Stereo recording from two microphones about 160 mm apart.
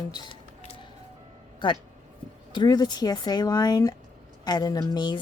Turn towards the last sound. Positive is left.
turn(degrees=25)  # may be behind; listen again after turning